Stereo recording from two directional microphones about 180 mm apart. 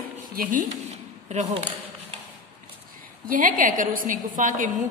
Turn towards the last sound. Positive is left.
turn(degrees=-45)  # may be behind; listen again after turning